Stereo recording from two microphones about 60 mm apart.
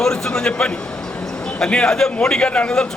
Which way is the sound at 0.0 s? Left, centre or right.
Centre.